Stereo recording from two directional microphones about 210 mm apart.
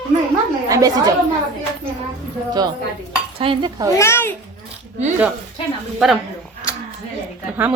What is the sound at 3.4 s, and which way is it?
Cutlery, 25° right (ahead or behind).